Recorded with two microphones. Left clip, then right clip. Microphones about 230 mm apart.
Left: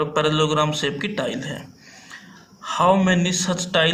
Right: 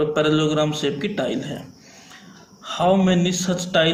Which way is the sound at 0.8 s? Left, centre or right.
Left.